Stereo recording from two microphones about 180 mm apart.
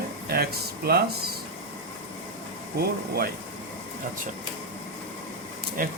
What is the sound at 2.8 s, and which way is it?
Speech, 60° right (ahead or behind).